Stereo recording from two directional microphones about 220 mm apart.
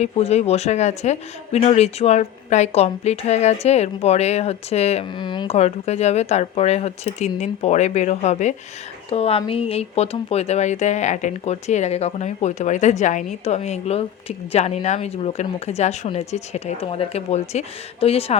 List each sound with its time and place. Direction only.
0.0 s speech: 30° left (ahead or behind)